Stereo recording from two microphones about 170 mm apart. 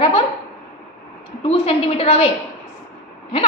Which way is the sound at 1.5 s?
35° left (ahead or behind).